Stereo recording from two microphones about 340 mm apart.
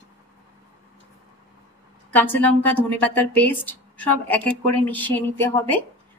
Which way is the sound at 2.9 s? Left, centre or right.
Centre.